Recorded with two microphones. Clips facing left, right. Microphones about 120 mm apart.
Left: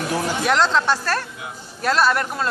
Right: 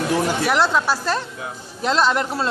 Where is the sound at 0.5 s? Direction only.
10° right (ahead or behind).